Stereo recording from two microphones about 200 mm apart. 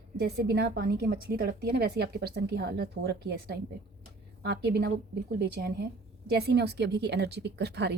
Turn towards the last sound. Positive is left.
turn(degrees=-55)  # may be behind; listen again after turning